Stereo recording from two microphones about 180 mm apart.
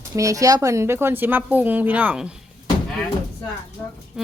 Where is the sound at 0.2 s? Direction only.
20° right (ahead or behind).